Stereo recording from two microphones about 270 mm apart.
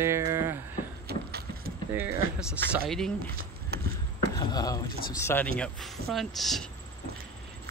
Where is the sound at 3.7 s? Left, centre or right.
Right.